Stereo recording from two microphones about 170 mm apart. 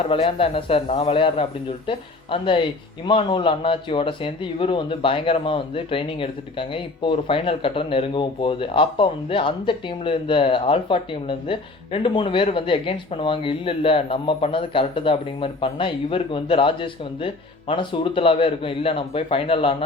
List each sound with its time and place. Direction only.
0.1 s speech: 30° left (ahead or behind)